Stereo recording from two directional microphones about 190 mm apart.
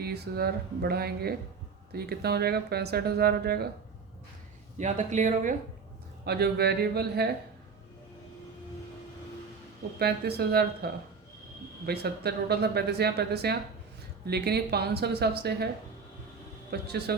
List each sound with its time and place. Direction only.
0.0 s speech: 55° right (ahead or behind)
4.8 s speech: 40° right (ahead or behind)
6.2 s speech: 55° right (ahead or behind)
10.0 s speech: 55° right (ahead or behind)
11.9 s speech: 60° right (ahead or behind)
16.8 s speech: 60° right (ahead or behind)